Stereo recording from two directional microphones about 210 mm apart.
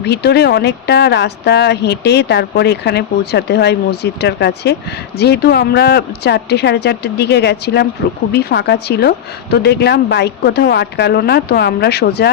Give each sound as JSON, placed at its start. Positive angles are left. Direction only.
{"t": 0.0, "sound": "speech", "side_deg": 50}